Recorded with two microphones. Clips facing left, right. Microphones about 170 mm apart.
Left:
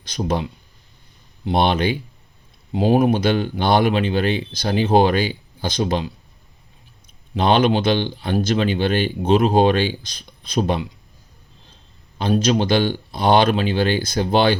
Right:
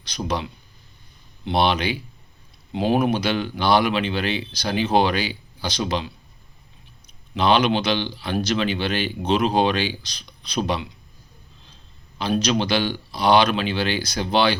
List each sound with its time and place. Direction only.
0.0 s speech: 50° left (ahead or behind)
1.5 s speech: 50° left (ahead or behind)
7.3 s speech: 50° left (ahead or behind)
12.2 s speech: 45° left (ahead or behind)